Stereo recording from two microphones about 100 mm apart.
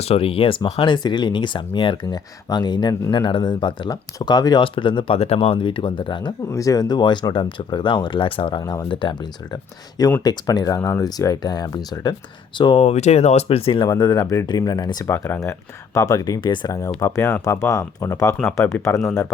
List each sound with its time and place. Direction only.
0.0 s speech: 70° left (ahead or behind); by 4.6 s 45° left (ahead or behind)
4.6 s speech: 55° left (ahead or behind); by 5.5 s 90° left
5.5 s speech: 55° left (ahead or behind)
6.5 s speech: 35° left (ahead or behind); by 9.6 s 55° left (ahead or behind)
10.2 s speech: 40° left (ahead or behind)
12.5 s speech: 50° left (ahead or behind)
12.8 s speech: 90° left; by 13.8 s 70° left (ahead or behind)
14.0 s speech: 40° left (ahead or behind)
15.0 s speech: 25° left (ahead or behind)